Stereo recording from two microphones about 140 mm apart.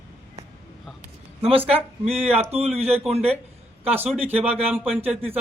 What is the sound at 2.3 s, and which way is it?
Speech, 45° right (ahead or behind).